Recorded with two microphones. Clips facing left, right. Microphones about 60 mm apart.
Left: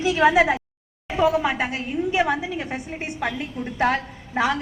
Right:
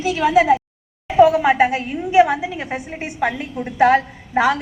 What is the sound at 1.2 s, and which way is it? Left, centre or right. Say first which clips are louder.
A woman's voice: right 8 dB; right.